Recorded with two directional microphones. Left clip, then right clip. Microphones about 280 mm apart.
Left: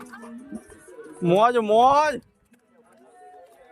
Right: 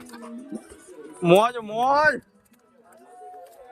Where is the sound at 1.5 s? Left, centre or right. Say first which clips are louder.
Left 12 dB; left.